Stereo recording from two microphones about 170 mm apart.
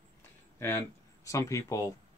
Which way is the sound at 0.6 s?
15° left (ahead or behind).